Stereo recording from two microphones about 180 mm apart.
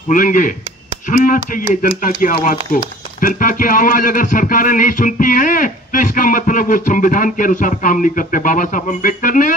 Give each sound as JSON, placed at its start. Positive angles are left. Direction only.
{"t": 0.1, "sound": "speech", "side_deg": 45}